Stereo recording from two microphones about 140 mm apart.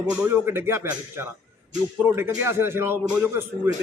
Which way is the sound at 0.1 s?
15° right (ahead or behind).